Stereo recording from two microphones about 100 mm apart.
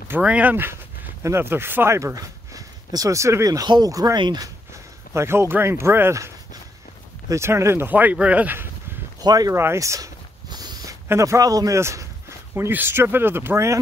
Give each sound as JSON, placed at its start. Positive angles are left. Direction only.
{"t": 0.2, "sound": "speech", "side_deg": -15}
{"t": 4.7, "sound": "speech", "side_deg": -25}
{"t": 9.2, "sound": "speech", "side_deg": -40}
{"t": 9.5, "sound": "a sound", "side_deg": -25}
{"t": 11.1, "sound": "speech", "side_deg": -30}